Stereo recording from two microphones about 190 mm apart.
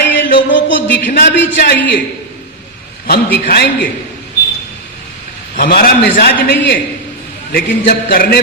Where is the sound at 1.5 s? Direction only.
60° left (ahead or behind).